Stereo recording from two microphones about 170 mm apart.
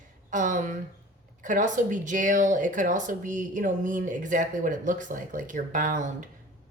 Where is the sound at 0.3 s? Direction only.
50° right (ahead or behind).